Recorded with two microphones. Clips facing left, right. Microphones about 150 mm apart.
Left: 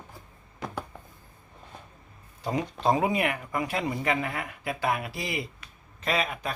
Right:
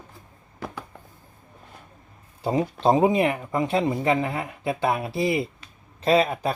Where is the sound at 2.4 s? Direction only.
30° right (ahead or behind).